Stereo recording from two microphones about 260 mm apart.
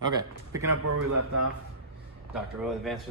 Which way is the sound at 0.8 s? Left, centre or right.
Right.